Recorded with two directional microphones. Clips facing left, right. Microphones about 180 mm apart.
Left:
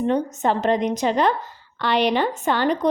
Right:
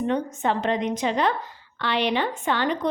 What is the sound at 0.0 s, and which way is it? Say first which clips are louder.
A woman's voice: left 3 dB; 35° left (ahead or behind).